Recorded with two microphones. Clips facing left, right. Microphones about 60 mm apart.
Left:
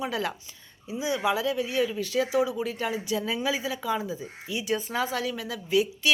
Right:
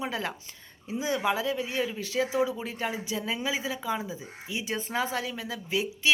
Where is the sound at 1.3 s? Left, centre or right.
Right.